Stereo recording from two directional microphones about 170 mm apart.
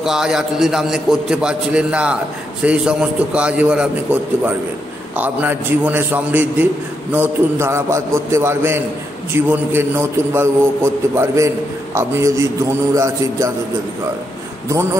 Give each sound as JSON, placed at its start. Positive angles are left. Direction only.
{"t": 0.0, "sound": "a man's voice", "side_deg": -5}